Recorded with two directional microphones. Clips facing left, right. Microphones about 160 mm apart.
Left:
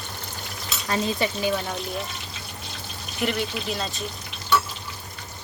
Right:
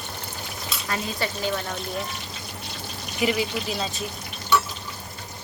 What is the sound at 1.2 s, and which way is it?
Speech, 15° left (ahead or behind).